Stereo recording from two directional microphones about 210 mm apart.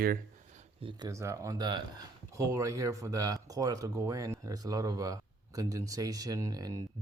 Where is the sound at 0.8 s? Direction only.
20° right (ahead or behind).